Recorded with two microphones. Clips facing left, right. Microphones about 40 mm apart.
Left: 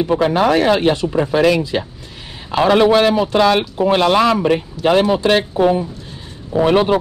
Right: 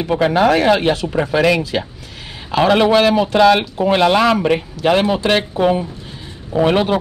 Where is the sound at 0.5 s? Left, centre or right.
Right.